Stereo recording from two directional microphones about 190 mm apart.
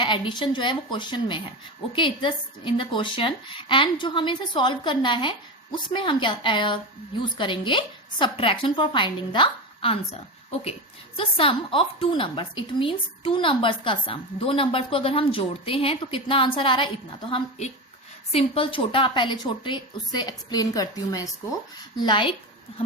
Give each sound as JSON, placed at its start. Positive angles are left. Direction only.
{"t": 0.0, "sound": "a woman's voice", "side_deg": 25}
{"t": 11.2, "sound": "a woman's voice", "side_deg": 30}
{"t": 18.3, "sound": "a woman's voice", "side_deg": 30}